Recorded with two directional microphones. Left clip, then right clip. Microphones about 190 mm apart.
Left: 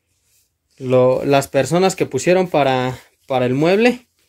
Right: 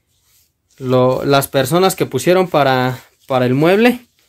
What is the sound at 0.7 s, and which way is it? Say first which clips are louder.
Speech: even; 15° left (ahead or behind).